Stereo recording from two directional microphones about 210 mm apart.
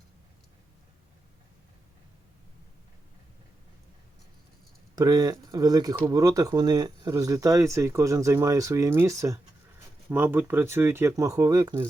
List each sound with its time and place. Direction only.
4.9 s speech: 20° right (ahead or behind)